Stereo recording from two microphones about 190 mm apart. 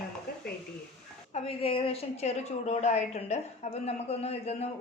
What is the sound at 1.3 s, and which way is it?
A woman's voice, 30° left (ahead or behind).